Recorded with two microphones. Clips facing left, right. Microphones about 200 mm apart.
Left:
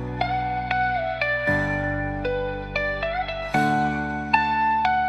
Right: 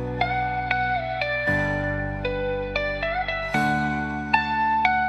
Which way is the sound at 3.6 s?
30° left (ahead or behind).